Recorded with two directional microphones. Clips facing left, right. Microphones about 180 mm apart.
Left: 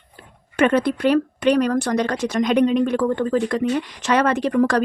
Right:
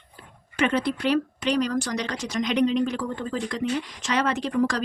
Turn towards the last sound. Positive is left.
turn(degrees=60)  # may be behind; listen again after turning